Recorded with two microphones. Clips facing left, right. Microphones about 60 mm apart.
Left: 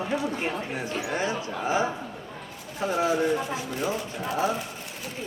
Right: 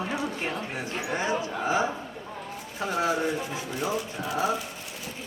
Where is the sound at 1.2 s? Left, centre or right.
Right.